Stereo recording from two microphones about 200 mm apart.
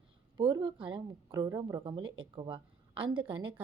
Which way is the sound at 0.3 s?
25° right (ahead or behind).